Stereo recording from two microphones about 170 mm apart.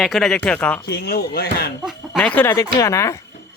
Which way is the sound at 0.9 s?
65° left (ahead or behind).